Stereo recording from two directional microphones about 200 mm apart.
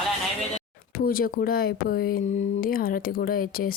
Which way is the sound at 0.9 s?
45° left (ahead or behind).